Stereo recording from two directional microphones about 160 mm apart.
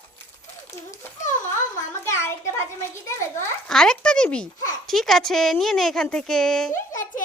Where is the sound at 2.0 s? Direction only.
15° left (ahead or behind).